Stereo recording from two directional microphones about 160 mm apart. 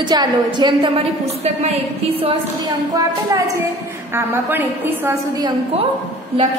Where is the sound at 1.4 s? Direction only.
40° right (ahead or behind).